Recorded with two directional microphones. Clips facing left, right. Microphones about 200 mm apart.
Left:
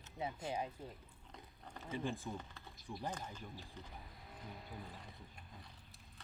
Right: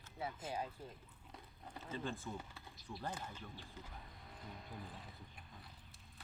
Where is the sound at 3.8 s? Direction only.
5° left (ahead or behind).